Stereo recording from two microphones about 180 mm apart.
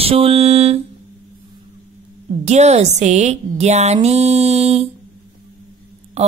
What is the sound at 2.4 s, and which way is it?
A woman's voice, 40° right (ahead or behind).